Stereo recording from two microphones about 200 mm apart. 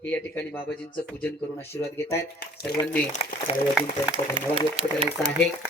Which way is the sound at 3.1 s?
35° left (ahead or behind).